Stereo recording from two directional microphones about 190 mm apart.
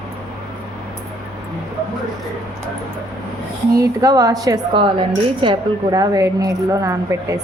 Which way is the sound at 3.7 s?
20° right (ahead or behind).